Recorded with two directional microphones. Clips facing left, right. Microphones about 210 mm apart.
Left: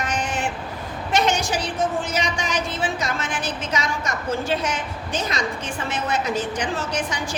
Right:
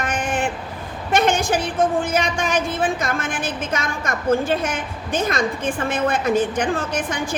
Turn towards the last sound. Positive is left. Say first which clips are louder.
# right 3 dB
turn(degrees=-55)  # may be behind; listen again after turning